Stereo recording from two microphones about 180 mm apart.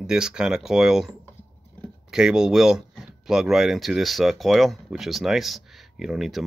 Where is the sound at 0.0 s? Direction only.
5° right (ahead or behind).